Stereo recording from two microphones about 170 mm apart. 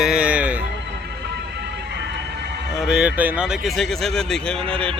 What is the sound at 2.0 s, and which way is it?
Music, 90° right.